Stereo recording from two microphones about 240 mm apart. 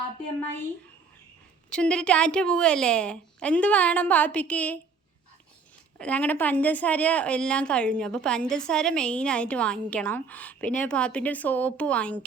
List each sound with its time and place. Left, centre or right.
1.7 s a woman's voice: centre
6.0 s a woman's voice: centre